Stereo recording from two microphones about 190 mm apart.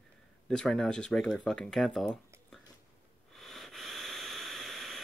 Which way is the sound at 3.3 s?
Centre (ahead or behind).